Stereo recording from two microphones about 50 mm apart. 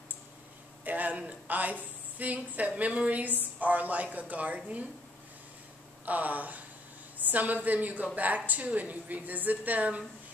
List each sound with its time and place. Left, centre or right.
0.8 s a sound: right
1.1 s speech: right
6.0 s speech: right